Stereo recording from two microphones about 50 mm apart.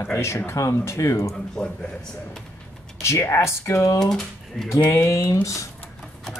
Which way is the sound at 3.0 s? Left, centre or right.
Left.